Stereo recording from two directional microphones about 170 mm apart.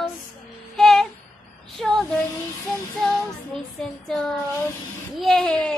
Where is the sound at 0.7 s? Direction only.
Centre (ahead or behind).